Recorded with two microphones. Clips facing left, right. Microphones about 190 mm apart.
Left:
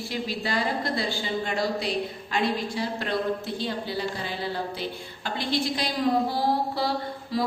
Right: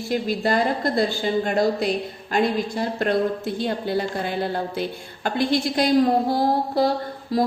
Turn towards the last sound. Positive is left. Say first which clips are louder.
# right 5 dB
turn(degrees=-45)  # may be behind; listen again after turning